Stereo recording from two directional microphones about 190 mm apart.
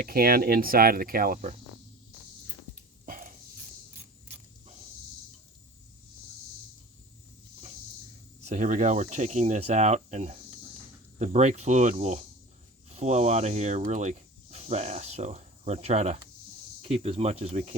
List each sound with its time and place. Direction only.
0.0 s speech: 50° right (ahead or behind)
3.1 s dog: 45° right (ahead or behind)
8.4 s speech: 40° right (ahead or behind)